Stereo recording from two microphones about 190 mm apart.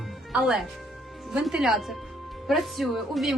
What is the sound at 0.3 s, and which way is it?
Speech, centre (ahead or behind).